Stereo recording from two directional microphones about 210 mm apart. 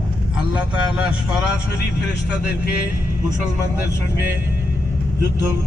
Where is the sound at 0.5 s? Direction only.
5° right (ahead or behind).